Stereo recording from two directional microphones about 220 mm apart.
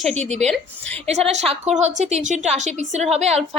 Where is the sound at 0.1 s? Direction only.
30° right (ahead or behind).